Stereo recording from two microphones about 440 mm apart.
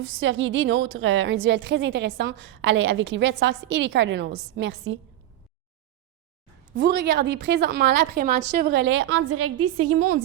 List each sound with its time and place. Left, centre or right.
0.0 s a woman's voice: right
6.7 s a woman's voice: right